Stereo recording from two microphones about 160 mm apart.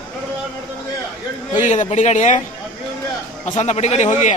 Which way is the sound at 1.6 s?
50° left (ahead or behind).